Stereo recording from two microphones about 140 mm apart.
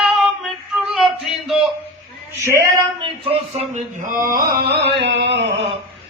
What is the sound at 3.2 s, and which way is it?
Music, 45° right (ahead or behind).